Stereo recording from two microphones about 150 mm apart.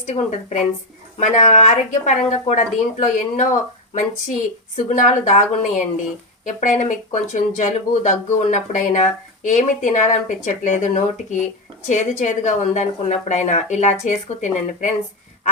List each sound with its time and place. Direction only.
0.0 s a woman's voice: 50° left (ahead or behind)